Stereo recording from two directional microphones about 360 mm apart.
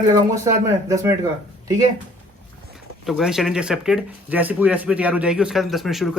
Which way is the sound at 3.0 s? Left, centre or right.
Centre.